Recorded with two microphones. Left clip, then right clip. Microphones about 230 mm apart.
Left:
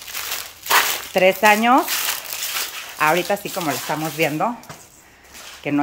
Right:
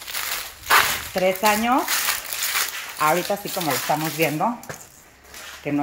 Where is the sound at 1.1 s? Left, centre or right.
Centre.